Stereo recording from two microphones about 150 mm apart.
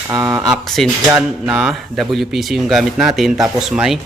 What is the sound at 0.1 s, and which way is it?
Speech, 20° right (ahead or behind).